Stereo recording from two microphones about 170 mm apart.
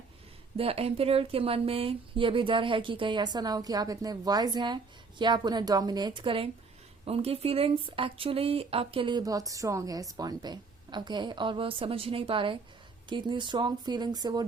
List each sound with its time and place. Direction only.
0.5 s speech: 35° right (ahead or behind)